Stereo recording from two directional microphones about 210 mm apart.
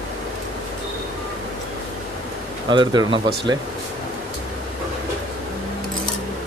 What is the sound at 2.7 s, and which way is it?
Speech, 20° right (ahead or behind).